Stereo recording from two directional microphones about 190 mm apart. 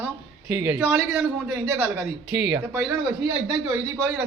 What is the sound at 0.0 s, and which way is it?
A man's voice, 10° right (ahead or behind).